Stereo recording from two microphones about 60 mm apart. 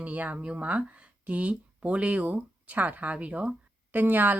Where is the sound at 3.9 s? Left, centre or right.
Right.